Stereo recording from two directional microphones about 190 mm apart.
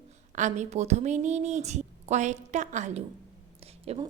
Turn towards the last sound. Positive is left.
turn(degrees=-30)  # may be behind; listen again after turning